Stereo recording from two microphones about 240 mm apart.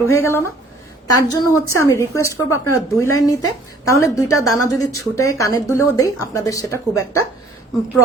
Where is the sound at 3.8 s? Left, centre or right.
Centre.